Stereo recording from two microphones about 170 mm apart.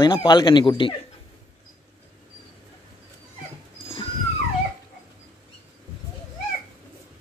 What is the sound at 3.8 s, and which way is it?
Dog, 35° left (ahead or behind).